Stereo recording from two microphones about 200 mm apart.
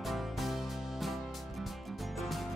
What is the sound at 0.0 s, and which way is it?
Music, centre (ahead or behind).